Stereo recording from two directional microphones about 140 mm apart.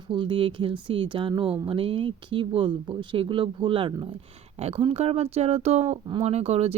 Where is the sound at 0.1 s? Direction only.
35° right (ahead or behind).